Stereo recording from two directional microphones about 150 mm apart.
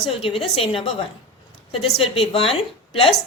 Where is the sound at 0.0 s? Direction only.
40° left (ahead or behind).